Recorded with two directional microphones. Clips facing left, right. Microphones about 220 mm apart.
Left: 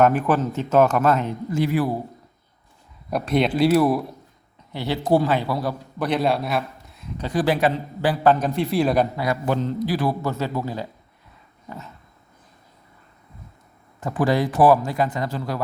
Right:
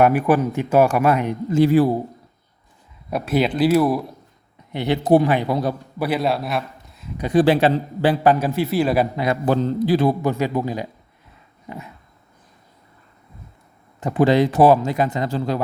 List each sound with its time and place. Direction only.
0.0 s speech: 10° right (ahead or behind)
1.5 s a man's voice: 30° right (ahead or behind)
3.1 s speech: centre (ahead or behind)
4.7 s a man's voice: 20° right (ahead or behind)
6.0 s a man's voice: 5° right (ahead or behind)
7.2 s a man's voice: 20° right (ahead or behind)
8.2 s speech: 10° right (ahead or behind)
9.1 s a man's voice: 20° right (ahead or behind)
14.0 s a man's voice: 25° right (ahead or behind)